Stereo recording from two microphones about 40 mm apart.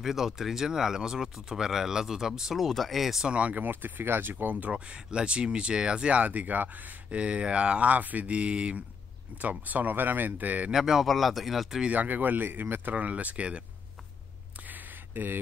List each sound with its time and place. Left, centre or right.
0.0 s speech: centre
2.6 s speech: centre
3.3 s speech: right
3.5 s speech: right
4.6 s speech: right
6.2 s speech: right
7.1 s speech: right
9.4 s speech: right
10.7 s speech: centre
11.1 s speech: centre
11.9 s speech: right
12.9 s speech: right
14.7 s a sound: right